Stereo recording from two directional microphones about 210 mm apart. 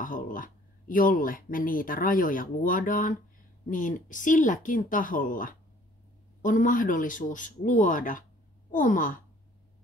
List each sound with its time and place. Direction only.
0.0 s speech: 40° left (ahead or behind)